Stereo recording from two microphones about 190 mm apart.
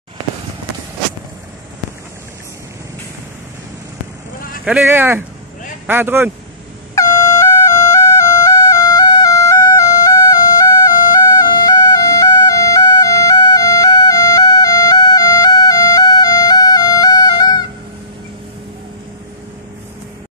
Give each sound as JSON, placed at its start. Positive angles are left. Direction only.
{"t": 4.6, "sound": "speech", "side_deg": -10}
{"t": 7.0, "sound": "music", "side_deg": 15}